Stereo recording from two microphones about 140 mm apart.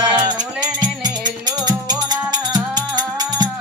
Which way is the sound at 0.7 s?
30° right (ahead or behind).